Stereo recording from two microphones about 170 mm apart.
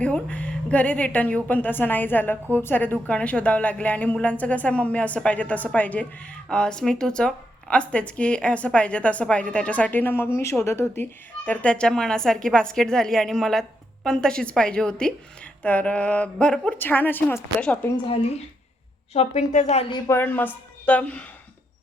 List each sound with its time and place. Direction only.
0.0 s a woman's voice: 10° left (ahead or behind)
17.9 s a woman's voice: 35° left (ahead or behind)
20.1 s a woman's voice: 15° left (ahead or behind)